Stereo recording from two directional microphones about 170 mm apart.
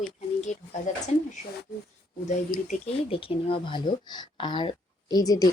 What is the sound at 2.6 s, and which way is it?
Speech, 35° left (ahead or behind).